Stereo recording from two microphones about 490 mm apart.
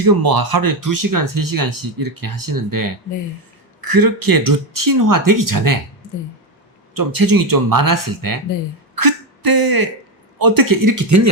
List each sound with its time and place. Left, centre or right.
0.0 s speech: right
6.9 s speech: right